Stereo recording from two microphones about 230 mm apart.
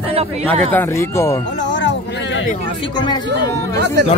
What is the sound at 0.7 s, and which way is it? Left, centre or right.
Speech, centre.